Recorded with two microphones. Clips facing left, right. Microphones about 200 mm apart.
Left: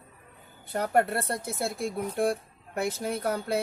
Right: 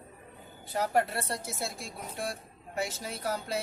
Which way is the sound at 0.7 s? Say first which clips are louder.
Left 3 dB; 55° left (ahead or behind).